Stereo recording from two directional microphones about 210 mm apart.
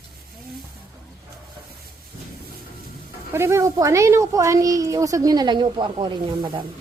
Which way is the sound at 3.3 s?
15° right (ahead or behind).